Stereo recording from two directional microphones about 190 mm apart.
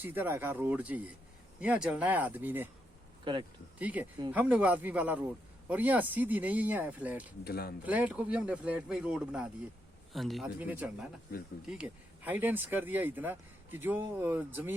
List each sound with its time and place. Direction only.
0.0 s a man's voice: 10° right (ahead or behind)
3.3 s speech: 25° right (ahead or behind)
3.8 s a man's voice: 10° right (ahead or behind)
7.4 s speech: 55° left (ahead or behind)
7.9 s a man's voice: 10° right (ahead or behind)